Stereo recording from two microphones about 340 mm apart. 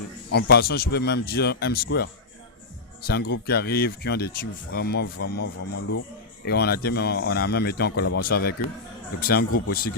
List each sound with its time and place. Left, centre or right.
0.3 s speech: left